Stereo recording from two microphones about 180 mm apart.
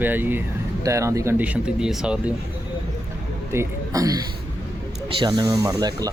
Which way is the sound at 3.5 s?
15° right (ahead or behind).